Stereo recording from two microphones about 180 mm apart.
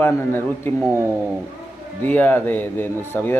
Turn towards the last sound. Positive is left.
turn(degrees=10)  # may be behind; listen again after turning